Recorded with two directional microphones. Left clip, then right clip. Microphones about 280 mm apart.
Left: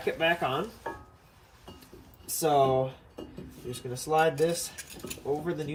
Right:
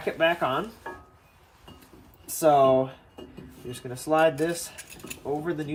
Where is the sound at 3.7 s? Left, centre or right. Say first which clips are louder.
Right 3 dB; centre.